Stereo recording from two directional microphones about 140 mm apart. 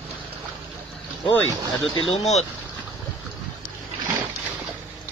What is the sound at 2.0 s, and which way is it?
Speech, 50° left (ahead or behind).